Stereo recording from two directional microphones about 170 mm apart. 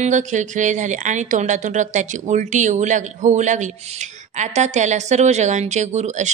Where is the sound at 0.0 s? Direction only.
45° right (ahead or behind).